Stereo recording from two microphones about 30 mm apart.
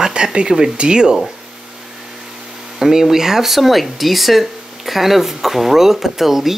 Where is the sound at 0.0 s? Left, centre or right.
Right.